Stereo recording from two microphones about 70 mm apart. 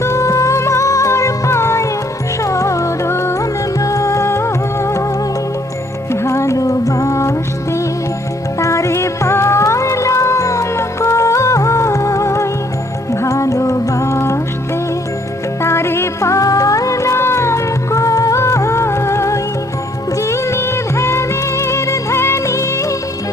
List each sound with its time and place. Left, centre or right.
0.0 s music: left
3.8 s music: left
6.1 s music: left
15.6 s music: left